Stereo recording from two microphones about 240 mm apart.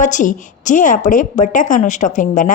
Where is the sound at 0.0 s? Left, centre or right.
Left.